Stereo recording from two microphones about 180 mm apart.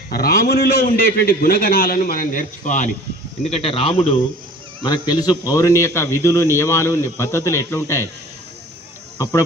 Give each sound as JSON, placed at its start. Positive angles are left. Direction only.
{"t": 0.1, "sound": "a man's voice", "side_deg": 60}
{"t": 3.5, "sound": "a man's voice", "side_deg": 30}
{"t": 9.1, "sound": "speech", "side_deg": 15}